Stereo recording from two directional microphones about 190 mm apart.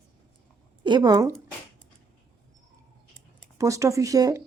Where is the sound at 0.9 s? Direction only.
20° right (ahead or behind).